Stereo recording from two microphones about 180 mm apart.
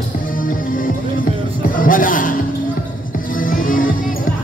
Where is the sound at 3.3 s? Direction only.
50° left (ahead or behind).